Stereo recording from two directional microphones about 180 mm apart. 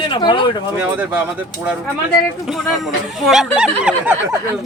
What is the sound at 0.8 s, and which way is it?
Speech, 10° right (ahead or behind).